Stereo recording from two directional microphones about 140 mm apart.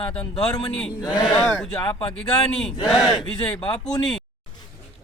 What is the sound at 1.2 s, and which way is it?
Speech, centre (ahead or behind).